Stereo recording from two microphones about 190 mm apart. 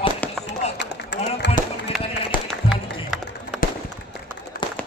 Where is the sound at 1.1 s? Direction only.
70° left (ahead or behind).